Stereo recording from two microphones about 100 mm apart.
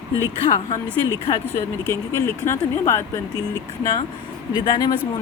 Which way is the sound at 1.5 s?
25° left (ahead or behind).